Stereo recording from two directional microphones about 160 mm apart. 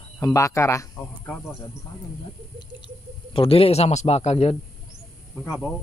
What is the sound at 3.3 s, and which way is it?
A man's voice, 35° left (ahead or behind).